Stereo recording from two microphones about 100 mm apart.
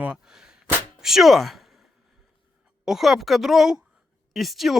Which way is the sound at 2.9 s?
Centre (ahead or behind).